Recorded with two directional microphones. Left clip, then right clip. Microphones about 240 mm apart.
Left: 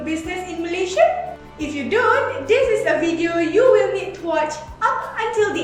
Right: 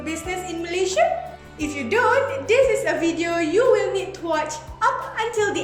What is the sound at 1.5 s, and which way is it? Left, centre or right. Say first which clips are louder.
Music: left 1 dB; right.